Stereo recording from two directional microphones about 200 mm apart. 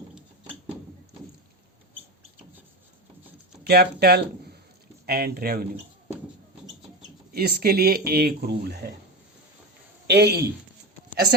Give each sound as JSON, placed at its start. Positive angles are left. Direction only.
{"t": 3.6, "sound": "speech", "side_deg": -50}
{"t": 7.3, "sound": "speech", "side_deg": -50}
{"t": 10.1, "sound": "speech", "side_deg": -55}